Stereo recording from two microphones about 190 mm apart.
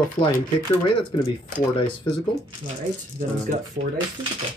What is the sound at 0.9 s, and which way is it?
Speech, 25° left (ahead or behind).